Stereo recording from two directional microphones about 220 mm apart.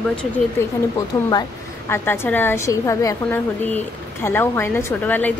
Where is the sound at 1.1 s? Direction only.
15° left (ahead or behind).